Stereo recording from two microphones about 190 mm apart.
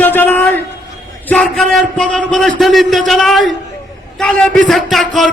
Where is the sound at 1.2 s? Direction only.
5° left (ahead or behind).